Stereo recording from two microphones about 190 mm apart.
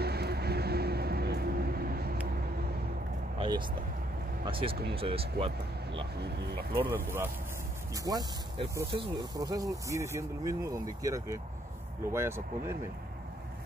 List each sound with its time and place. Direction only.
0.0 s vehicle: 60° right (ahead or behind)
3.3 s vehicle: 25° right (ahead or behind)
4.5 s speech: 30° right (ahead or behind)
6.1 s speech: 60° right (ahead or behind)
6.9 s speech: 10° right (ahead or behind)